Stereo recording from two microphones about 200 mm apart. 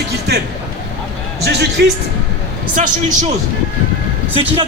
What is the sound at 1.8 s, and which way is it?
Speech, 55° right (ahead or behind).